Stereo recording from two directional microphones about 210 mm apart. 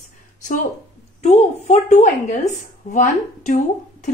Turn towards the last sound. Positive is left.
turn(degrees=35)  # may be behind; listen again after turning